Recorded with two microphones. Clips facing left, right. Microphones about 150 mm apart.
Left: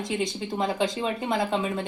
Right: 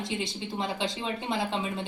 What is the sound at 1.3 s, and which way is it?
Speech, 50° left (ahead or behind).